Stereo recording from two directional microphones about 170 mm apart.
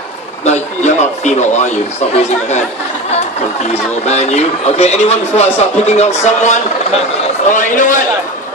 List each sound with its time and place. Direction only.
0.5 s a man's voice: 40° left (ahead or behind)